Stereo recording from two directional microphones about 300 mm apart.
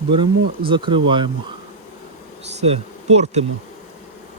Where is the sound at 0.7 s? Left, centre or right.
Centre.